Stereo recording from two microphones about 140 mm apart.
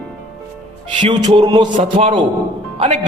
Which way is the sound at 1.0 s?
35° right (ahead or behind).